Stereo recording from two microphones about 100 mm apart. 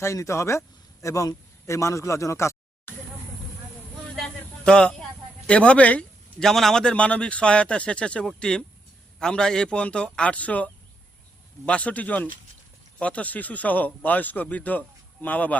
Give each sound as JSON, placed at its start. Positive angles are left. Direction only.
{"t": 0.0, "sound": "speech", "side_deg": 30}
{"t": 4.1, "sound": "a sound", "side_deg": 5}
{"t": 5.5, "sound": "a man's voice", "side_deg": 10}